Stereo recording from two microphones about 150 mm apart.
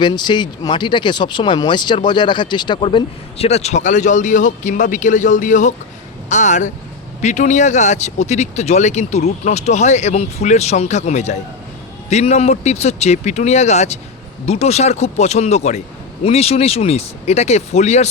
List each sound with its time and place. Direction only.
0.0 s speech: 30° left (ahead or behind); by 18.1 s 50° left (ahead or behind)